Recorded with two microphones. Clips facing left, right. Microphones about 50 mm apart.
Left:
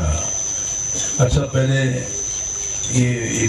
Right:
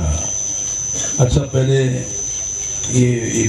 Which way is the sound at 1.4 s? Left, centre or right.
Left.